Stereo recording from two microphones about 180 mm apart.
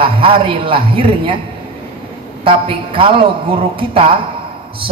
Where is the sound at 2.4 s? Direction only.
30° right (ahead or behind).